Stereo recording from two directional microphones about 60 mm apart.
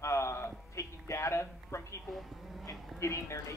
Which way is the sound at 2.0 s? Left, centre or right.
Centre.